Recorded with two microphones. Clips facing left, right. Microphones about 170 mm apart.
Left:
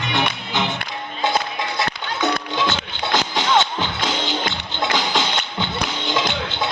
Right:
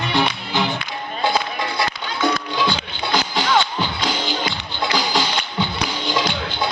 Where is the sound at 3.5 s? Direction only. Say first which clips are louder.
Left 1 dB; 25° left (ahead or behind).